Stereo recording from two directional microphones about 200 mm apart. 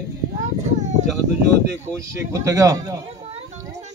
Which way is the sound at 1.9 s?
15° right (ahead or behind).